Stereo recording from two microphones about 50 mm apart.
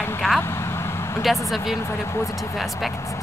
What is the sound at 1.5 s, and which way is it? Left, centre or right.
Speech, centre.